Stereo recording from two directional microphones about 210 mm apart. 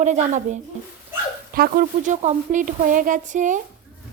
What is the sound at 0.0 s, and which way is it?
Speech, 35° right (ahead or behind).